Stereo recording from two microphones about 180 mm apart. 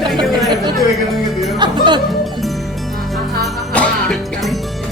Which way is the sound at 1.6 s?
25° right (ahead or behind).